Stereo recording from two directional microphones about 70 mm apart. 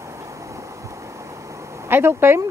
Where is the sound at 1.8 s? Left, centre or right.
Right.